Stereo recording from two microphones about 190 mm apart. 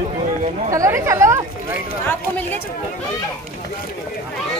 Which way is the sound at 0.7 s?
15° right (ahead or behind).